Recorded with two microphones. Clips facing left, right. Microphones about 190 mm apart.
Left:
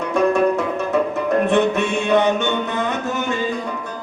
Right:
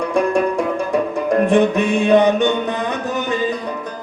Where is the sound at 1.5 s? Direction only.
15° right (ahead or behind).